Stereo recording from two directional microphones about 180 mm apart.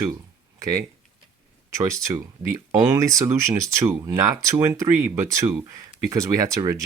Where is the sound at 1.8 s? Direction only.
15° right (ahead or behind).